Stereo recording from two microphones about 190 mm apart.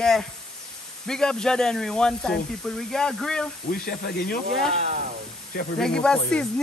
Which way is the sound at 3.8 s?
55° left (ahead or behind).